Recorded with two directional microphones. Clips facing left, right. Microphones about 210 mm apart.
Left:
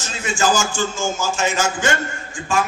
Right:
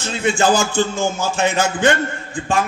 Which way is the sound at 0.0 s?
60° right (ahead or behind).